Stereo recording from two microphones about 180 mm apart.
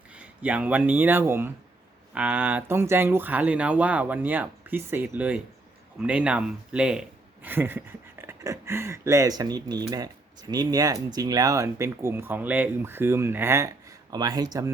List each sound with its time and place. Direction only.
0.1 s speech: 5° right (ahead or behind)